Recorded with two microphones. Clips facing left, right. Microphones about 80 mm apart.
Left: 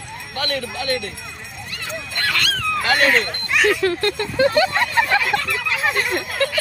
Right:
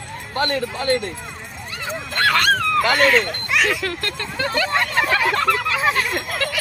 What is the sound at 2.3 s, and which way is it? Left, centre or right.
Speech, right.